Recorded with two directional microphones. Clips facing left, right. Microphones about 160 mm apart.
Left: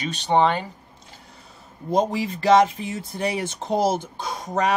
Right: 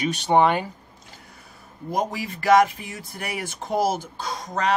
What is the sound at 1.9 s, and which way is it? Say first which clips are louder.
Speech: left 5 dB; 25° left (ahead or behind).